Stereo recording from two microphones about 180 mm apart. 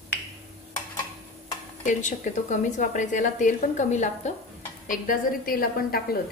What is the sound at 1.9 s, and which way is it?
A woman's voice, 45° left (ahead or behind).